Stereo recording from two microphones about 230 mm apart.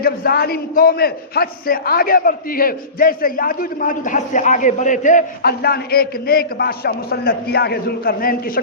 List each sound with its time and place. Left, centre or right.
0.0 s a man's voice: left